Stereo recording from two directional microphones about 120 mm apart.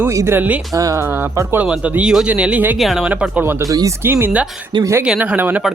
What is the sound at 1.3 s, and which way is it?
Speech, 25° right (ahead or behind).